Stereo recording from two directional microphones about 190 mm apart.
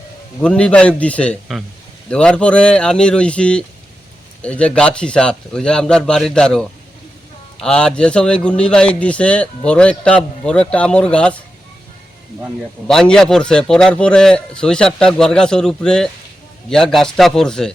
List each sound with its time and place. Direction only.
0.4 s a man's voice: 5° left (ahead or behind)
12.9 s a man's voice: 5° left (ahead or behind)